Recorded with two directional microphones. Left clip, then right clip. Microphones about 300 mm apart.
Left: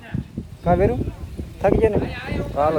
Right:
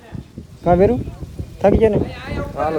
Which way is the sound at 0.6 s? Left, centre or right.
Right.